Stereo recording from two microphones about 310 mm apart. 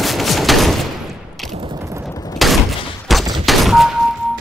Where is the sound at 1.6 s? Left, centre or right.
Centre.